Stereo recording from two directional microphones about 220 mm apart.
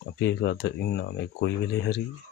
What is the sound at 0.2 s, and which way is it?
Speech, 50° left (ahead or behind).